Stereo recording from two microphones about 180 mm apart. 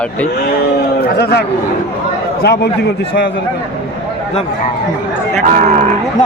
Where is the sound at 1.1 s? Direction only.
65° left (ahead or behind).